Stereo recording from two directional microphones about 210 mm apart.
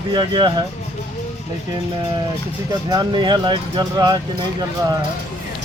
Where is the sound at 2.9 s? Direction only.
20° right (ahead or behind).